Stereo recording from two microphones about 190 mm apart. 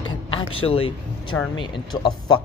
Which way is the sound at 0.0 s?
30° left (ahead or behind).